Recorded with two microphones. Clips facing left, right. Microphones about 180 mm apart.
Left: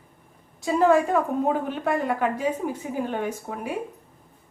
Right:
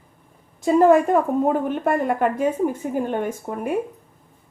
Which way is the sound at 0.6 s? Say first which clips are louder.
Right 5 dB; 50° right (ahead or behind).